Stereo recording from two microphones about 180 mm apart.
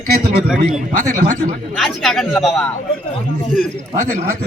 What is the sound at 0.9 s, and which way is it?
Speech, 45° right (ahead or behind).